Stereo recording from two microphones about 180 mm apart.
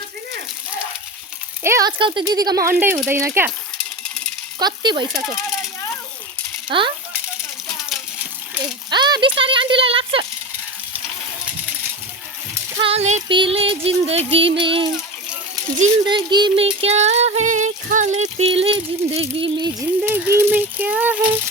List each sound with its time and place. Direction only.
1.6 s speech: 15° right (ahead or behind)
2.0 s speech: 25° right (ahead or behind)
4.6 s speech: 25° right (ahead or behind)
6.7 s speech: 25° right (ahead or behind)
8.9 s speech: 25° right (ahead or behind)
12.7 s a sound: 35° right (ahead or behind)
13.2 s a sound: 30° right (ahead or behind)
16.0 s a sound: 25° right (ahead or behind); by 18.4 s 40° right (ahead or behind)
18.6 s speech: 30° right (ahead or behind)
20.1 s speech: 10° right (ahead or behind)